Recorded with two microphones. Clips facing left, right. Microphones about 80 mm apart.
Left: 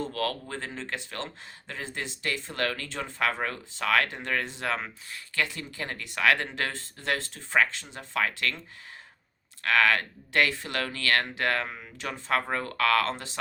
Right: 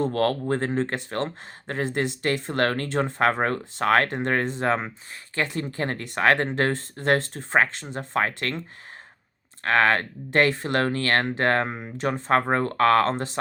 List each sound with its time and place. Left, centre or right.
0.0 s speech: right
9.6 s speech: right